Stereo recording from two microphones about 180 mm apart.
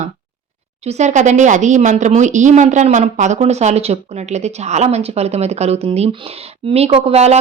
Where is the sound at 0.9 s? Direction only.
40° right (ahead or behind).